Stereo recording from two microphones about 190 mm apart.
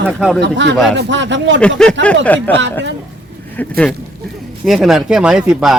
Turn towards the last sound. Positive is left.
turn(degrees=-5)  # may be behind; listen again after turning